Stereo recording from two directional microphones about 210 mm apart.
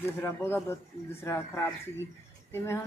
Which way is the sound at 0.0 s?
10° left (ahead or behind).